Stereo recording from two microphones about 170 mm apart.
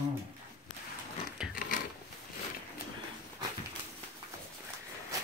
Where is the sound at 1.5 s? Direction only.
50° left (ahead or behind).